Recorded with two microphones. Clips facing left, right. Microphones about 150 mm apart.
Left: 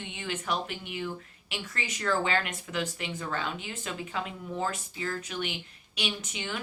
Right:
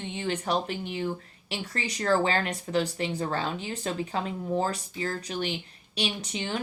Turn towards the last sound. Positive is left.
turn(degrees=-35)  # may be behind; listen again after turning